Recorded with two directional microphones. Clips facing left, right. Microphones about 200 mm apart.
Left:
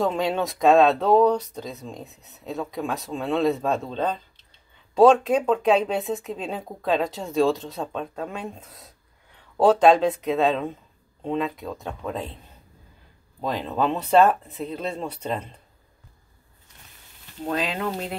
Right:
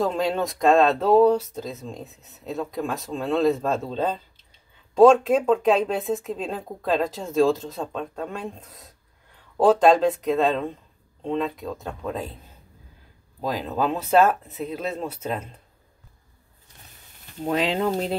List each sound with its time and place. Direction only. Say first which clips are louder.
0.0 s speech: even; centre (ahead or behind)
13.4 s speech: even; 5° right (ahead or behind)
17.4 s speech: right 4 dB; 20° right (ahead or behind)